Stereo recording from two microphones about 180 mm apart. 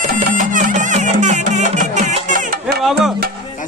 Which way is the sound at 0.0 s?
45° right (ahead or behind).